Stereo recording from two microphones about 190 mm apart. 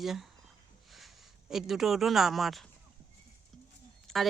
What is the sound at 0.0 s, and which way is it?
Speech, centre (ahead or behind).